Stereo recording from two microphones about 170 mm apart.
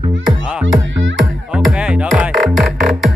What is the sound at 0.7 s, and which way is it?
Music, 90° right.